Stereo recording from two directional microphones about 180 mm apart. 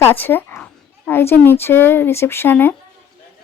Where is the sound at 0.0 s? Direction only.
10° left (ahead or behind).